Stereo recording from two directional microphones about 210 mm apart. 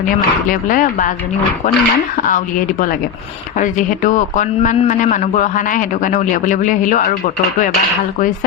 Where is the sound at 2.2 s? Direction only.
40° left (ahead or behind).